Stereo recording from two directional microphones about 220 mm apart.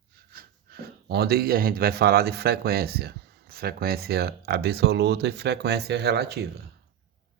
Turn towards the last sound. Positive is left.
turn(degrees=-50)  # may be behind; listen again after turning